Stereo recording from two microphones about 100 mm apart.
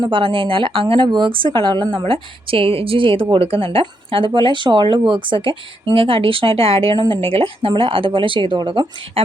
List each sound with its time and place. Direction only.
0.0 s speech: 55° right (ahead or behind)
2.0 s speech: 65° right (ahead or behind)
4.3 s speech: 50° right (ahead or behind)